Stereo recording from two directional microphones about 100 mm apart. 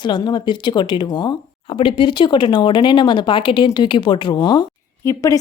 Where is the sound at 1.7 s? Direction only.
60° left (ahead or behind).